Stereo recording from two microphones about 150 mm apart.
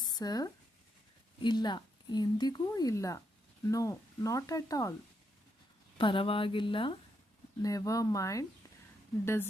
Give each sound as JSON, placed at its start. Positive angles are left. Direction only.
{"t": 0.0, "sound": "a woman's voice", "side_deg": 25}
{"t": 6.0, "sound": "a woman's voice", "side_deg": 35}
{"t": 7.6, "sound": "a woman's voice", "side_deg": 25}